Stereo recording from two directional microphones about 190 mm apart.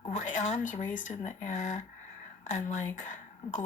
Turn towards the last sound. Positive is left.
turn(degrees=40)  # may be behind; listen again after turning